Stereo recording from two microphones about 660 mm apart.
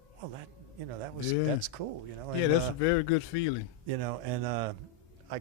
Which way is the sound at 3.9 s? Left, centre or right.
Right.